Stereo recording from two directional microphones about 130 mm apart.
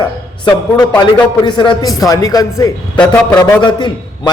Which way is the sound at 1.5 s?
35° left (ahead or behind).